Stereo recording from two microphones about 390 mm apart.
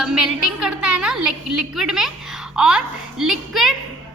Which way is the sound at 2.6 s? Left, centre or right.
Centre.